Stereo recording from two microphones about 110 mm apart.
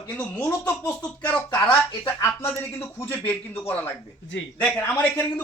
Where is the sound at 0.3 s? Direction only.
15° left (ahead or behind).